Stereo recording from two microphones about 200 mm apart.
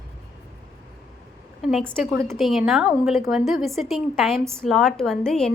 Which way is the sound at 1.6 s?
Centre (ahead or behind).